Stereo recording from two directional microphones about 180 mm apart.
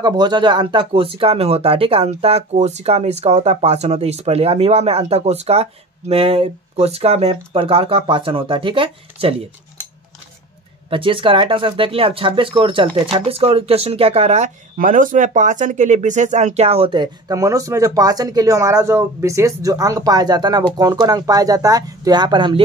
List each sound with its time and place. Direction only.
0.0 s speech: 25° right (ahead or behind)
10.9 s speech: 30° right (ahead or behind)